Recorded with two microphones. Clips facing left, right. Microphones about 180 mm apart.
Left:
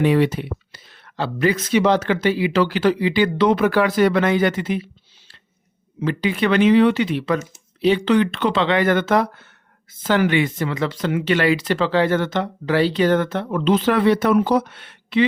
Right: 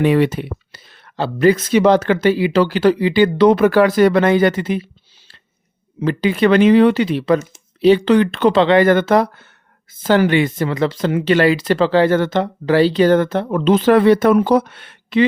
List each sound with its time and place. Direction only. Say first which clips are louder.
0.0 s speech: right 3 dB; 60° right (ahead or behind); by 4.8 s 40° right (ahead or behind)
6.1 s speech: right 5 dB; 40° right (ahead or behind)